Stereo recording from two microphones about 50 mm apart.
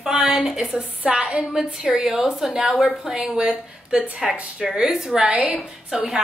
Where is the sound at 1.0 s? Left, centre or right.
Centre.